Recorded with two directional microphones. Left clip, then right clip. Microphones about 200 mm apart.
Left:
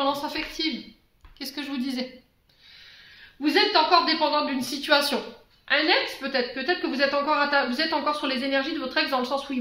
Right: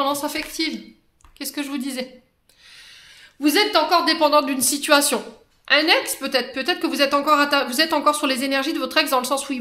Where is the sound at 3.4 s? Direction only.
60° right (ahead or behind).